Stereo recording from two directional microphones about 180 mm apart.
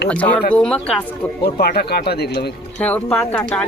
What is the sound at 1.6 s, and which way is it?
Speech, 60° left (ahead or behind).